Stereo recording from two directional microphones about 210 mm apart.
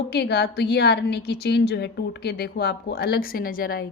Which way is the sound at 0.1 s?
50° left (ahead or behind).